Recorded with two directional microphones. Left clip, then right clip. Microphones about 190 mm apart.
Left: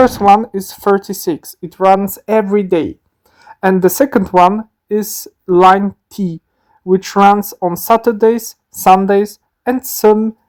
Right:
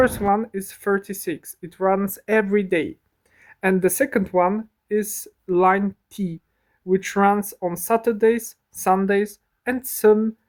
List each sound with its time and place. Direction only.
0.2 s speech: 20° left (ahead or behind)